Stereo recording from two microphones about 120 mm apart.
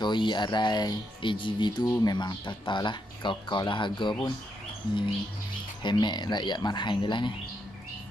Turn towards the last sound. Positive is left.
turn(degrees=40)  # may be behind; listen again after turning